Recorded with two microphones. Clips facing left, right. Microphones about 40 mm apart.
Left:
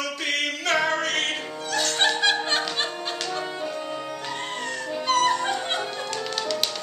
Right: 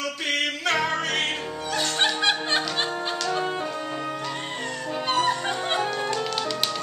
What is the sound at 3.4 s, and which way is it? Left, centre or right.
Music, right.